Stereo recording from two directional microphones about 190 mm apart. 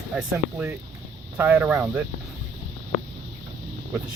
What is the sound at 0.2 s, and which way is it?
Speech, 10° right (ahead or behind).